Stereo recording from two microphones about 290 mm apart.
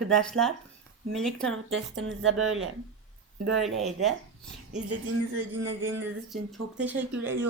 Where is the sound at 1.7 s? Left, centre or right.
Right.